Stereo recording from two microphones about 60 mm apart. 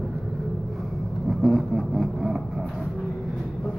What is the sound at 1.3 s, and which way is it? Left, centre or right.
Vehicle, centre.